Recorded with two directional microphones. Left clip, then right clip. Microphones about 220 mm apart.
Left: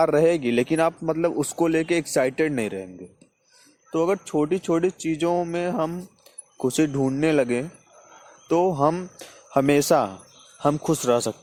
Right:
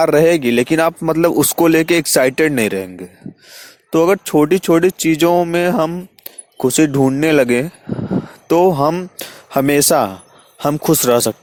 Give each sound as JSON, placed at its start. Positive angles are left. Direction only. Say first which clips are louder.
{"t": 0.0, "sound": "speech", "louder": "right 7 dB", "side_deg": -35}